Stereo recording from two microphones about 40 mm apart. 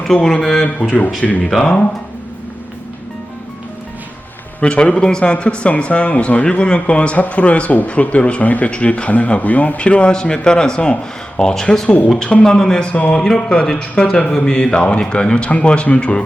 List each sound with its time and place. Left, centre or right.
0.1 s speech: centre
1.5 s a man's voice: left
4.6 s a man's voice: left
8.7 s a man's voice: left
12.9 s speech: left
13.1 s a man's voice: centre